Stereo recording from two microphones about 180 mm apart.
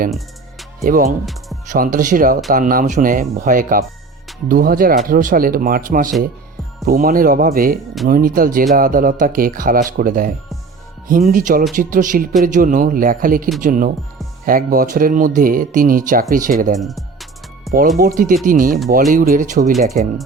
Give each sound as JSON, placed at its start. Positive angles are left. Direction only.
{"t": 0.9, "sound": "speech", "side_deg": -50}
{"t": 1.2, "sound": "music", "side_deg": 0}
{"t": 1.7, "sound": "speech", "side_deg": -50}
{"t": 16.8, "sound": "music", "side_deg": 0}
{"t": 18.0, "sound": "speech", "side_deg": -50}